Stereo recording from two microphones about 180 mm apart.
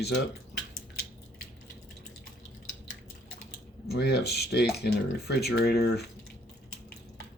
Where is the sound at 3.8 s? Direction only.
65° left (ahead or behind).